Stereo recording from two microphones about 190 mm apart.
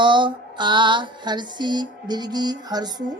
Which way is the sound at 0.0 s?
25° right (ahead or behind).